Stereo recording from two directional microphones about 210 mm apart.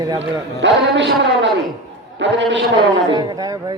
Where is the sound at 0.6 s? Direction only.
55° right (ahead or behind).